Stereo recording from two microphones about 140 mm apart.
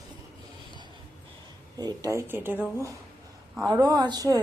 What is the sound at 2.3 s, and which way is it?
Speech, 15° right (ahead or behind).